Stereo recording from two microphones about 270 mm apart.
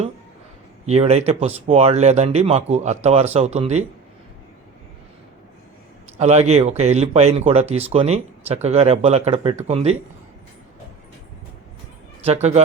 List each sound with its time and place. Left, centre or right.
0.9 s speech: right
6.1 s speech: right
12.2 s speech: right